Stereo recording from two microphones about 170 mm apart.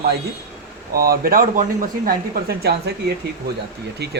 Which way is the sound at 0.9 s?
60° right (ahead or behind).